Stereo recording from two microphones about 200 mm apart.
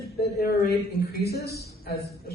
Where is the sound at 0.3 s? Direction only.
50° left (ahead or behind).